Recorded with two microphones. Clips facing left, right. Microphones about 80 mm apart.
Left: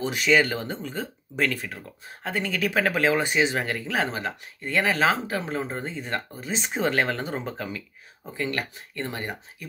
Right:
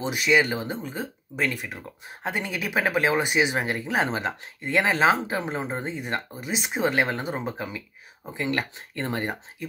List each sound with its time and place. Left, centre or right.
0.1 s speech: centre
2.0 s speech: centre